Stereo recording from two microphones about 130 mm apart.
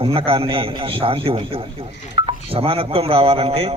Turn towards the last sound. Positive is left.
turn(degrees=-50)  # may be behind; listen again after turning